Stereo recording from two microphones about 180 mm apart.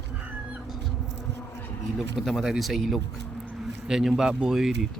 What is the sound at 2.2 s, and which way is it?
Speech, centre (ahead or behind).